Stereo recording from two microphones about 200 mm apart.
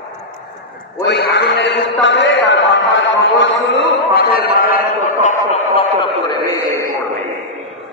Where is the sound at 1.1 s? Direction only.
60° left (ahead or behind).